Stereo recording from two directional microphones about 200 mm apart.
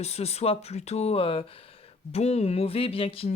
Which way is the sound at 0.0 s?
30° left (ahead or behind).